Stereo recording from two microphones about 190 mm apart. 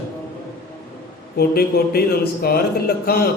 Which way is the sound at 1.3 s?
55° left (ahead or behind).